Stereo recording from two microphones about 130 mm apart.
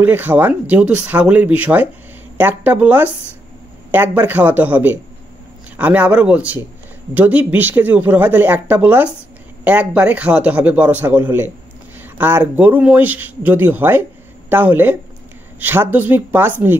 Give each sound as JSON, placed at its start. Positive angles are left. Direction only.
{"t": 0.0, "sound": "speech", "side_deg": -15}